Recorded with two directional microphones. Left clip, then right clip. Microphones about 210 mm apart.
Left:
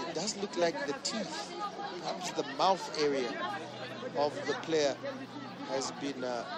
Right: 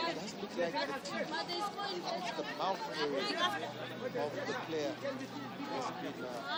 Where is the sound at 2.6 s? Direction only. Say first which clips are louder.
Left 8 dB; 20° left (ahead or behind).